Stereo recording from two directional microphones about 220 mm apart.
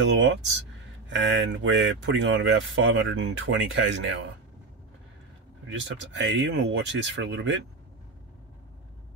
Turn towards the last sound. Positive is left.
turn(degrees=-55)  # may be behind; listen again after turning